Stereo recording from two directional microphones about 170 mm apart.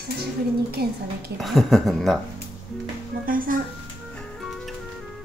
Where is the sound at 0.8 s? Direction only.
65° right (ahead or behind).